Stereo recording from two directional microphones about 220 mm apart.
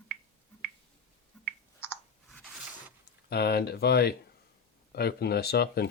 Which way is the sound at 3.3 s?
45° left (ahead or behind).